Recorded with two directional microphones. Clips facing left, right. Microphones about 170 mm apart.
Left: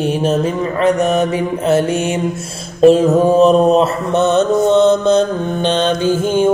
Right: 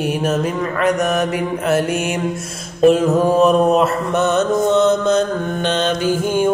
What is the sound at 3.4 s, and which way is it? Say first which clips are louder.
Mantra: left 3 dB; 30° left (ahead or behind).